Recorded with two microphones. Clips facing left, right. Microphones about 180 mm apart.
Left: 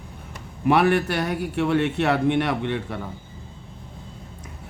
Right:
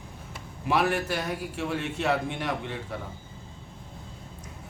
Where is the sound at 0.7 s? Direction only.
65° left (ahead or behind).